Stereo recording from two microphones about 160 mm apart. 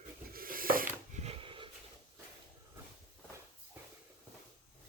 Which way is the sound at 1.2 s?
35° right (ahead or behind).